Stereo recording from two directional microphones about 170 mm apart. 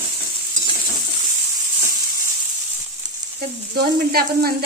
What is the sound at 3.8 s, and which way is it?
Sizzle, 60° right (ahead or behind).